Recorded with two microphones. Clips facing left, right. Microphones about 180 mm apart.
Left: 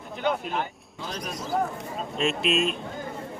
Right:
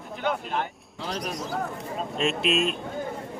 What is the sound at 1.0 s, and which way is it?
Speech, 80° right.